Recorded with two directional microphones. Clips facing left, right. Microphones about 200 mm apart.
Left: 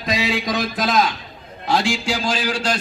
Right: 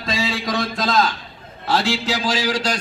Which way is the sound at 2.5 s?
10° right (ahead or behind).